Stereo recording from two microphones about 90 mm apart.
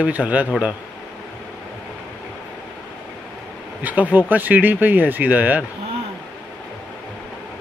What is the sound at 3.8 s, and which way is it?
Speech, 15° right (ahead or behind).